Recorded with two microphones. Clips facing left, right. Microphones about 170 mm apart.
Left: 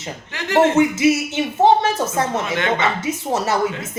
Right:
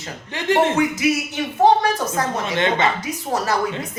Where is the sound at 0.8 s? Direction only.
25° left (ahead or behind).